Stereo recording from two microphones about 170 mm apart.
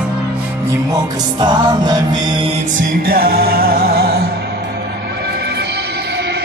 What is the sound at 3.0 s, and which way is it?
Music, 60° right (ahead or behind).